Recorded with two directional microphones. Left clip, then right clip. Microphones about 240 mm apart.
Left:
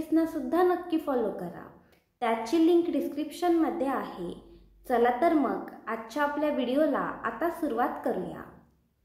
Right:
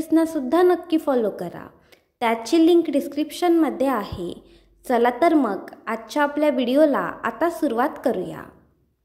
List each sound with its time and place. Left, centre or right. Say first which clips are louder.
0.1 s a woman's voice: right 8 dB; right